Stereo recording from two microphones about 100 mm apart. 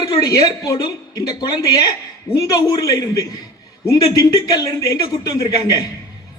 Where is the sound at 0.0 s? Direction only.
40° left (ahead or behind).